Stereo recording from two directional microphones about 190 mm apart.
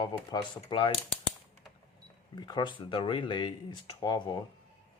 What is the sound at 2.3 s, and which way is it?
Speech, 25° left (ahead or behind).